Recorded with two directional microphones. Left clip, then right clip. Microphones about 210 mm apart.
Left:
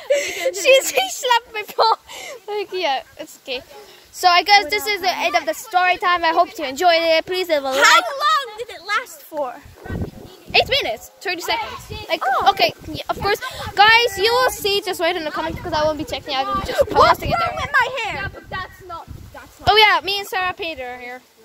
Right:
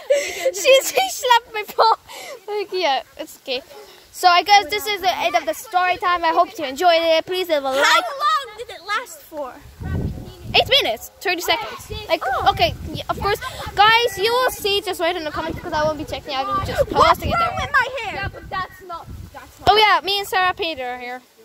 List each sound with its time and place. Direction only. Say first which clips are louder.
0.1 s whimper: even; 10° right (ahead or behind)
1.0 s speech: right 2 dB; 25° right (ahead or behind)
2.7 s speech: right 2 dB; 30° right (ahead or behind)
4.2 s a woman's voice: even; 10° right (ahead or behind)
7.7 s a child's voice: left 4 dB; 40° left (ahead or behind)
8.5 s a sound: left 2 dB; 10° left (ahead or behind)
10.7 s speech: right 3 dB; 40° right (ahead or behind)
12.4 s a woman's voice: right 1 dB; 5° left (ahead or behind)
17.6 s a child's voice: left 1 dB; 45° left (ahead or behind)
19.8 s a child's voice: left 5 dB; 10° right (ahead or behind)
20.2 s speech: right 3 dB; 30° right (ahead or behind)